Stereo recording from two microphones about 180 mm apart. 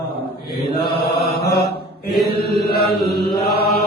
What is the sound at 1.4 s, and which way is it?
Mantra, 60° left (ahead or behind).